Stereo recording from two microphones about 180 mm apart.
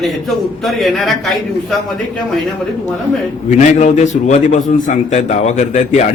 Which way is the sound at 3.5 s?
40° left (ahead or behind).